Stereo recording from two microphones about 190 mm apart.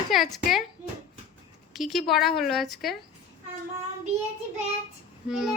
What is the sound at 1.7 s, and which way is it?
Speech, centre (ahead or behind).